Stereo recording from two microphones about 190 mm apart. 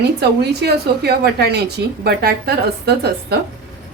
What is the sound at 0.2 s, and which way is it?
A woman's voice, 60° right (ahead or behind).